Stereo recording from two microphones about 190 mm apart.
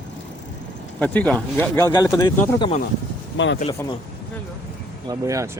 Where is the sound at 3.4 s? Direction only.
80° left.